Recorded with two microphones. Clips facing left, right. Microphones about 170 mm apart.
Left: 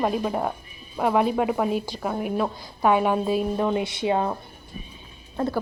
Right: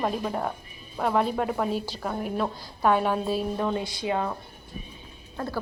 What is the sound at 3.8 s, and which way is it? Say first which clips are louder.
Speech: left 4 dB; 25° left (ahead or behind).